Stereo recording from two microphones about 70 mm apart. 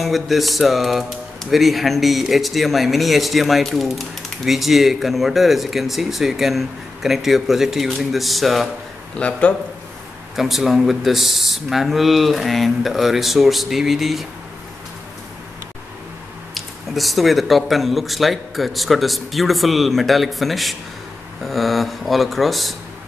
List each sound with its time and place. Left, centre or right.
0.0 s speech: centre
9.1 s a man's voice: centre
10.3 s speech: centre
16.5 s speech: centre